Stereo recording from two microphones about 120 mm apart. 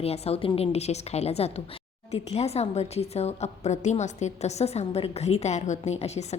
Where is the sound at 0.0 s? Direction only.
55° left (ahead or behind).